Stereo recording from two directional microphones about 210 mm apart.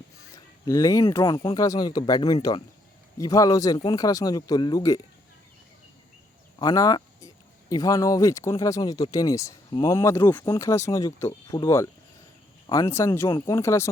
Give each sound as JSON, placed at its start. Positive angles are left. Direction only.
{"t": 0.3, "sound": "speech", "side_deg": 15}
{"t": 6.6, "sound": "speech", "side_deg": 15}